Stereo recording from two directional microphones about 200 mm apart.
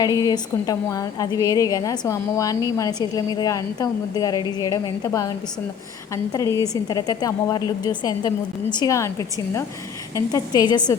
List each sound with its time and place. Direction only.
0.2 s a woman's voice: 20° left (ahead or behind)
6.3 s a woman's voice: 15° left (ahead or behind)